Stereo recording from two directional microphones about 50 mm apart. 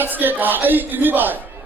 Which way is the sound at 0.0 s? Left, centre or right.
Right.